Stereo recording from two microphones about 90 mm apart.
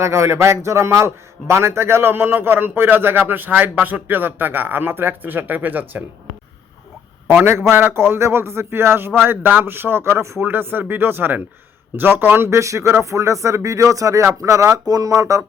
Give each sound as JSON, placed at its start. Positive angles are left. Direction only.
{"t": 0.0, "sound": "a man's voice", "side_deg": -30}
{"t": 7.7, "sound": "a man's voice", "side_deg": -25}